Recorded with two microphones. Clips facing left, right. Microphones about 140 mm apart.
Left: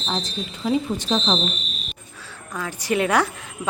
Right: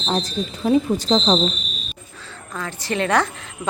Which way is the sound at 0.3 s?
40° right (ahead or behind).